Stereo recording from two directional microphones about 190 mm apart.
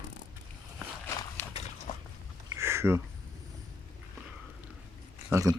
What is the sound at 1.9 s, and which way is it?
Dog, 40° left (ahead or behind).